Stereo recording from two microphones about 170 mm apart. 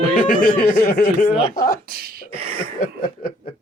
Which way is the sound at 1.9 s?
60° right (ahead or behind).